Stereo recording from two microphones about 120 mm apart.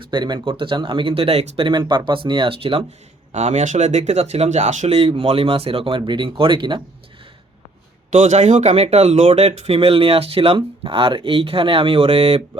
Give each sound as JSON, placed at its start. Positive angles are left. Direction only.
{"t": 0.0, "sound": "speech", "side_deg": -40}
{"t": 3.3, "sound": "speech", "side_deg": -75}
{"t": 5.2, "sound": "speech", "side_deg": -55}
{"t": 8.1, "sound": "speech", "side_deg": -80}